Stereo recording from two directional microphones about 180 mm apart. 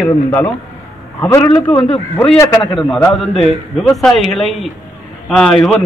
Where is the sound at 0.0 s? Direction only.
10° left (ahead or behind).